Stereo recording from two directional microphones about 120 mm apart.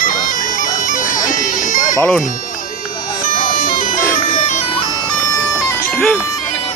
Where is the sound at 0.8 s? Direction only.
90° left.